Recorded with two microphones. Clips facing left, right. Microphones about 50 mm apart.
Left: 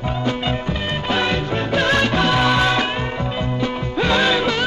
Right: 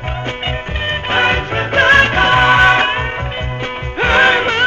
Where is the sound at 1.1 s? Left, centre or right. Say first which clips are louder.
Right 5 dB; right.